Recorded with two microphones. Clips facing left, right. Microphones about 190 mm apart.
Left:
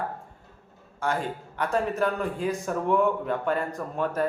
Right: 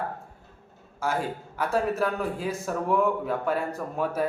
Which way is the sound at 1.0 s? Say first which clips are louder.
Even; 5° right (ahead or behind).